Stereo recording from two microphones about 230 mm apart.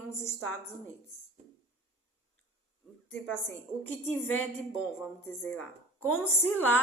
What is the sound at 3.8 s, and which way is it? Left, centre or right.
A woman's voice, centre.